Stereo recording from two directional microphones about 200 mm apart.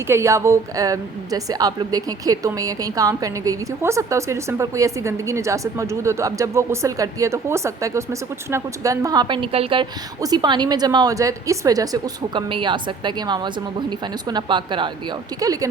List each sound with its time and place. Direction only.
0.1 s a woman's voice: 15° right (ahead or behind)